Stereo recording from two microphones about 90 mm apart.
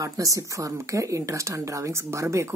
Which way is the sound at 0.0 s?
40° right (ahead or behind).